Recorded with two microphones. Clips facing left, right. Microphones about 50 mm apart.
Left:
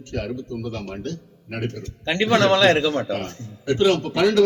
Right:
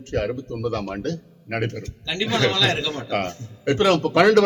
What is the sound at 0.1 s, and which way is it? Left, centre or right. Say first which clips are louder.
Speech: right 3 dB; right.